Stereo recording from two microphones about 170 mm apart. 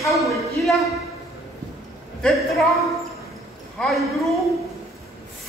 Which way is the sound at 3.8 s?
Centre (ahead or behind).